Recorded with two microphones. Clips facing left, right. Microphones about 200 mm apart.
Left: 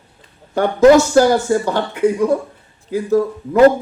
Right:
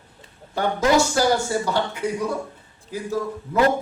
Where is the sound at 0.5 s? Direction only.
45° left (ahead or behind).